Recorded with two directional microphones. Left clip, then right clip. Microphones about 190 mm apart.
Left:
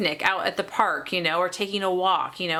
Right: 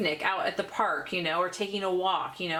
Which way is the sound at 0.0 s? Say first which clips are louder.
Left 4 dB; 30° left (ahead or behind).